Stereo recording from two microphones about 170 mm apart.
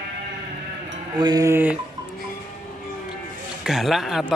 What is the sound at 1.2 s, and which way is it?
Speech, 20° right (ahead or behind).